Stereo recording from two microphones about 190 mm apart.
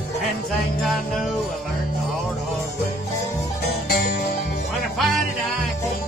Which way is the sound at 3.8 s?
55° left (ahead or behind).